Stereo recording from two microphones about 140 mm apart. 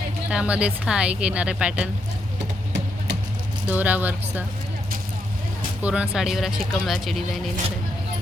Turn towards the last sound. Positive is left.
turn(degrees=0)  # may be behind; listen again after turning